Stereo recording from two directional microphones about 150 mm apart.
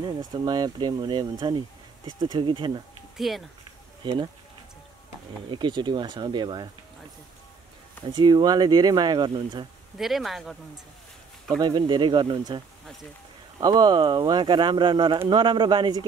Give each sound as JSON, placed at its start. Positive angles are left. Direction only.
{"t": 0.0, "sound": "speech", "side_deg": -30}
{"t": 3.2, "sound": "speech", "side_deg": 0}
{"t": 4.0, "sound": "speech", "side_deg": -30}
{"t": 5.5, "sound": "speech", "side_deg": -30}
{"t": 8.1, "sound": "speech", "side_deg": -30}
{"t": 9.9, "sound": "speech", "side_deg": 0}
{"t": 11.6, "sound": "speech", "side_deg": -30}